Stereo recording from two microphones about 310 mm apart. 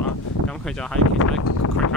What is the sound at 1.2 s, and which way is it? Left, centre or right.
Speech, left.